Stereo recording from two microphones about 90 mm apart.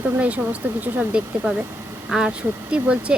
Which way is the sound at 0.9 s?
10° right (ahead or behind).